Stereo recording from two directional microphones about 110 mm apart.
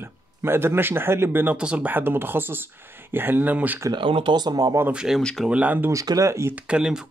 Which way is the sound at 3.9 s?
50° right (ahead or behind).